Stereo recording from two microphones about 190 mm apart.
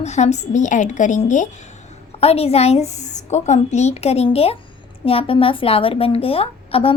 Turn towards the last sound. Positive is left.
turn(degrees=30)  # may be behind; listen again after turning